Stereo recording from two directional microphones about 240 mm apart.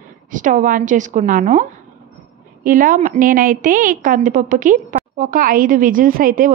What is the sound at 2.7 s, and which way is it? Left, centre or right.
A woman's voice, right.